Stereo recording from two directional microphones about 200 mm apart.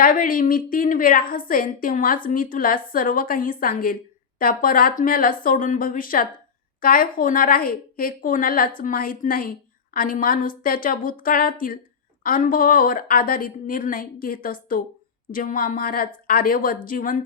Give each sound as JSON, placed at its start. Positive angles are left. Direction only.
{"t": 0.0, "sound": "a woman's voice", "side_deg": 45}